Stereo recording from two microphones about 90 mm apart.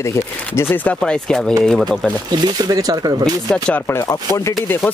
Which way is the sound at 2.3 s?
45° right (ahead or behind).